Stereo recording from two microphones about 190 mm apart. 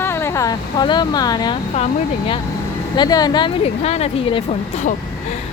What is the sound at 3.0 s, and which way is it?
Speech, 20° left (ahead or behind).